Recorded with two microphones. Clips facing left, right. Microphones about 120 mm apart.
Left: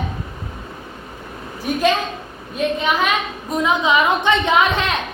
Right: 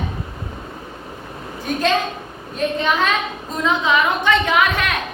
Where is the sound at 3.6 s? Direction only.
20° left (ahead or behind).